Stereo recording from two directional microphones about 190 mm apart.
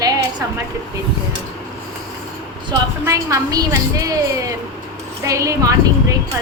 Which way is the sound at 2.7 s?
15° right (ahead or behind).